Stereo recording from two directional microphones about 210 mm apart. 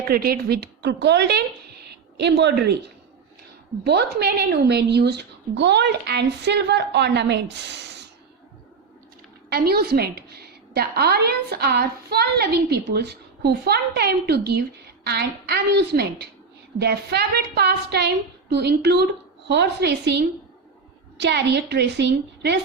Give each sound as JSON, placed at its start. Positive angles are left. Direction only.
{"t": 0.1, "sound": "a woman's voice", "side_deg": -45}
{"t": 3.8, "sound": "a woman's voice", "side_deg": -50}
{"t": 9.5, "sound": "a woman's voice", "side_deg": -45}